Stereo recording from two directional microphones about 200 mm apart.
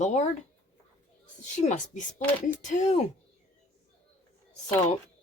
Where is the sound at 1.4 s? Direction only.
35° left (ahead or behind).